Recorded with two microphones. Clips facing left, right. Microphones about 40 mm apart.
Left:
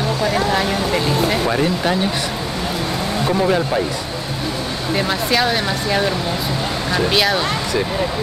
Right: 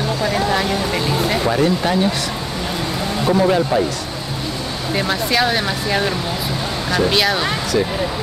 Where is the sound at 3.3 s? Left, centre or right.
Centre.